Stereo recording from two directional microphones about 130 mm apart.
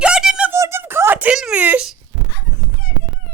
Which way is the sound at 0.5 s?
20° right (ahead or behind).